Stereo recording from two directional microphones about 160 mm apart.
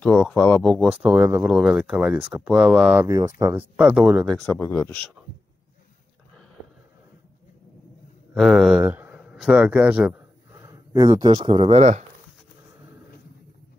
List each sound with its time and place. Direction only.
0.0 s speech: 5° left (ahead or behind)
1.0 s speech: 15° right (ahead or behind)
3.1 s speech: 20° right (ahead or behind)
3.7 s speech: 5° right (ahead or behind)
4.5 s speech: 15° left (ahead or behind)
8.4 s speech: centre (ahead or behind)
10.5 s speech: 20° right (ahead or behind)